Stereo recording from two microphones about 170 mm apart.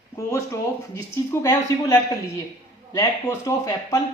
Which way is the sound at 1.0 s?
15° left (ahead or behind).